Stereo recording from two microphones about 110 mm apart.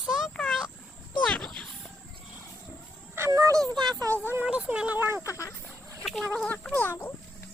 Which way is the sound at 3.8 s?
35° right (ahead or behind).